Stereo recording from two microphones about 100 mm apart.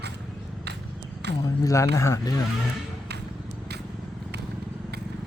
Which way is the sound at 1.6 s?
30° left (ahead or behind).